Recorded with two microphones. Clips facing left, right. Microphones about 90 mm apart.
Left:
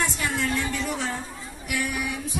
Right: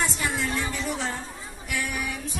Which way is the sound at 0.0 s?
5° right (ahead or behind).